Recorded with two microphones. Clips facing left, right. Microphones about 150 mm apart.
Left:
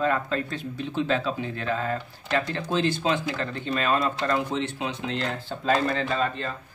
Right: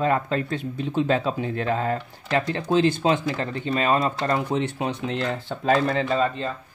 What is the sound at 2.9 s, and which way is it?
Speech, 50° right (ahead or behind).